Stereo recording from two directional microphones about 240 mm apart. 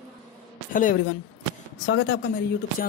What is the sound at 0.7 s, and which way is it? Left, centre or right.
Speech, left.